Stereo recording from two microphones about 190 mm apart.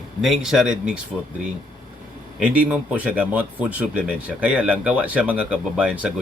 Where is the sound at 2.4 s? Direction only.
5° right (ahead or behind).